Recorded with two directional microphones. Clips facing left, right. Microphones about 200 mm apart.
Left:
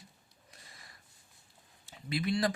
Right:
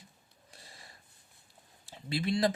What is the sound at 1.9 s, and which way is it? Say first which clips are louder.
Speech: right 1 dB; 30° right (ahead or behind).